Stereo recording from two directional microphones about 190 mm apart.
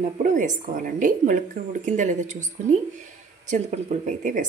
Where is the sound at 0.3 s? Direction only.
45° right (ahead or behind).